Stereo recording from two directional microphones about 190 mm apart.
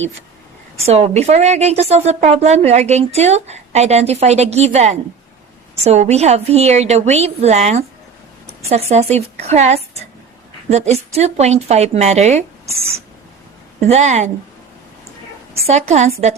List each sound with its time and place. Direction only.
0.9 s a woman's voice: 35° right (ahead or behind)
13.7 s a woman's voice: 35° right (ahead or behind)
15.6 s a woman's voice: 35° right (ahead or behind)